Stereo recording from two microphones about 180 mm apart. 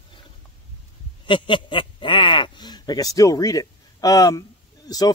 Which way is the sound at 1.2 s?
25° left (ahead or behind).